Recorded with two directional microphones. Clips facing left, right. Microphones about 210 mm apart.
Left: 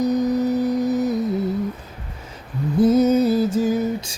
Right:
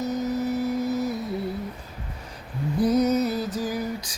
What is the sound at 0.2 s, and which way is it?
Music, 15° left (ahead or behind).